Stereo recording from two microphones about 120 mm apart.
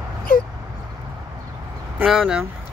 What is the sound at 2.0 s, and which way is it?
Speech, 5° right (ahead or behind).